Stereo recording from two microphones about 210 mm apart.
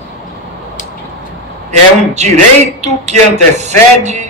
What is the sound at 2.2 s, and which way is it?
Speech, 35° right (ahead or behind).